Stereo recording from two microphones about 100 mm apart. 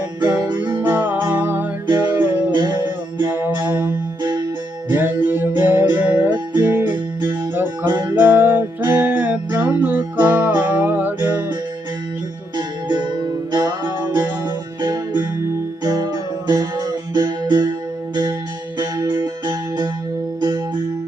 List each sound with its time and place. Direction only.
0.3 s music: 45° right (ahead or behind)
0.8 s music: 15° right (ahead or behind)
2.5 s music: 45° right (ahead or behind)
3.2 s music: 20° right (ahead or behind)
4.2 s music: 45° right (ahead or behind)
4.9 s music: 20° right (ahead or behind)
6.3 s music: 45° right (ahead or behind)
7.5 s music: 20° right (ahead or behind)
7.9 s music: 50° right (ahead or behind)
8.1 s music: 20° right (ahead or behind)
12.5 s music: 45° right (ahead or behind)